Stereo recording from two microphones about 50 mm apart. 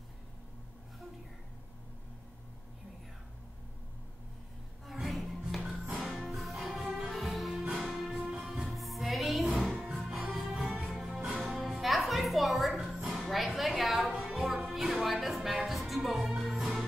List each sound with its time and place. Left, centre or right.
4.8 s music: centre